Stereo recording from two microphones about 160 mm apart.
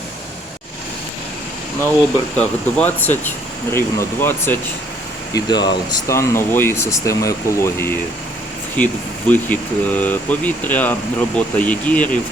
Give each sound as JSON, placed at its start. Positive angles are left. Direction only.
{"t": 2.3, "sound": "speech", "side_deg": 5}
{"t": 5.3, "sound": "speech", "side_deg": 25}